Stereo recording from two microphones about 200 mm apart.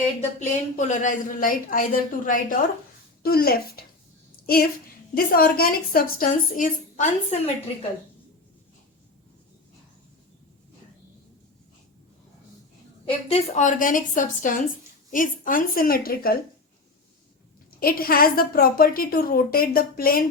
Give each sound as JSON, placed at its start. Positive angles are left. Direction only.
{"t": 0.2, "sound": "a woman's voice", "side_deg": 35}
{"t": 13.1, "sound": "a woman's voice", "side_deg": 30}
{"t": 17.7, "sound": "a woman's voice", "side_deg": 50}